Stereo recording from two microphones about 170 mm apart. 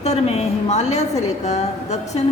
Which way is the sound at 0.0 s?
40° left (ahead or behind).